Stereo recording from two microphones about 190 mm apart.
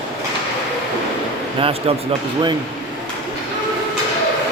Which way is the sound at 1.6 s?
30° right (ahead or behind).